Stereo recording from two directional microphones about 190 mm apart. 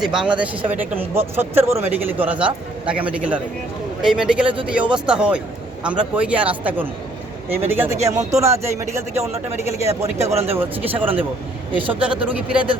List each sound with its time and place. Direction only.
0.0 s a man's voice: 5° right (ahead or behind)
7.9 s speech: 35° right (ahead or behind)
8.3 s a man's voice: 15° right (ahead or behind)
10.0 s speech: 35° right (ahead or behind)
10.6 s a man's voice: 10° right (ahead or behind)